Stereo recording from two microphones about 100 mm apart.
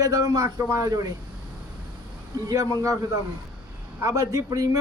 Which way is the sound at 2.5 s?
35° right (ahead or behind).